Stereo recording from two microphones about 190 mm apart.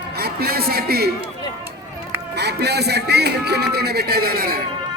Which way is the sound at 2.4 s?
60° right (ahead or behind).